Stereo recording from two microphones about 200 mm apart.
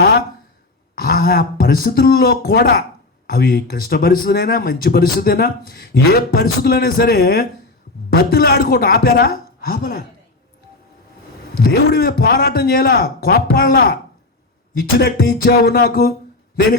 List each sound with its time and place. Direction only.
0.9 s speech: 50° left (ahead or behind)
11.9 s speech: 50° left (ahead or behind)
14.9 s speech: 50° left (ahead or behind)